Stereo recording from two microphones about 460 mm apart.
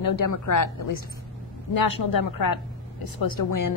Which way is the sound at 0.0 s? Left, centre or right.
Left.